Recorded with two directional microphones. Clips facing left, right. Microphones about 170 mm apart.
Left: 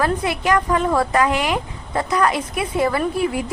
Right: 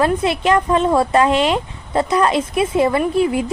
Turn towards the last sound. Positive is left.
turn(degrees=-25)  # may be behind; listen again after turning